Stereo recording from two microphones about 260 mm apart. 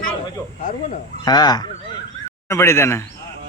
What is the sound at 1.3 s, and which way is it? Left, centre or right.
A man's voice, centre.